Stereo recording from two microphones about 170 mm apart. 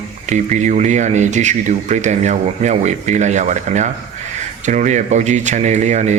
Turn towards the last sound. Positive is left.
turn(degrees=-45)  # may be behind; listen again after turning